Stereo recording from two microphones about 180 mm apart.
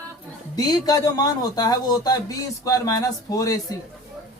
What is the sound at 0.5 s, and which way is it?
Speech, 20° left (ahead or behind).